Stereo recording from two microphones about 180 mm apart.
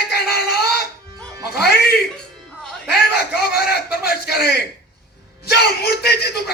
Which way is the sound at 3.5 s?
60° left (ahead or behind).